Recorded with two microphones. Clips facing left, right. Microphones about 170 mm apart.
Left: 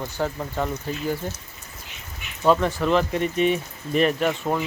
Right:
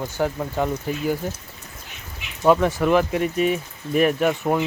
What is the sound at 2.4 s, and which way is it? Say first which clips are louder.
Speech: right 2 dB; 10° right (ahead or behind).